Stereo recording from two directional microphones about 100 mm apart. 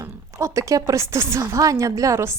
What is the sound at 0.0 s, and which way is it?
A woman's voice, 30° right (ahead or behind).